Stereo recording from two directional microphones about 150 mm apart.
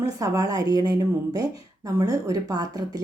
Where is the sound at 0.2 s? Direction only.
25° right (ahead or behind).